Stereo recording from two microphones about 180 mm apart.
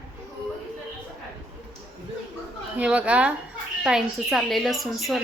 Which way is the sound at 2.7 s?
5° right (ahead or behind).